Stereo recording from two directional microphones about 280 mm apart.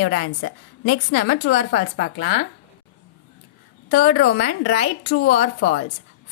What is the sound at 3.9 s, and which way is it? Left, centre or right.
A woman's voice, left.